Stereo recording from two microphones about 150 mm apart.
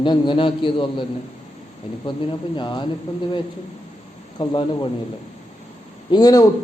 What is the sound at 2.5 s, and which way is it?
Speech, 30° left (ahead or behind).